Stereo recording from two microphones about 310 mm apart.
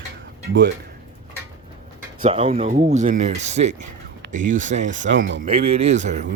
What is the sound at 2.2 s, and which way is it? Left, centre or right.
Speech, right.